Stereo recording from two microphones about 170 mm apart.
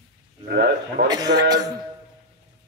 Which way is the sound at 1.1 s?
25° right (ahead or behind).